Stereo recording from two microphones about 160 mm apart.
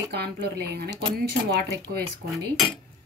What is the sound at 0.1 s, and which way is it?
Speech, 90° right.